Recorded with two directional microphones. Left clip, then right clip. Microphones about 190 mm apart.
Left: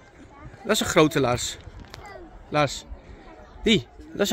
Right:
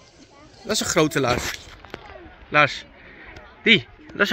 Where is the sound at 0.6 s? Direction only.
Centre (ahead or behind).